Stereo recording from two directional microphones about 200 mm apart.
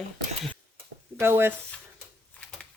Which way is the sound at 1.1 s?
10° right (ahead or behind).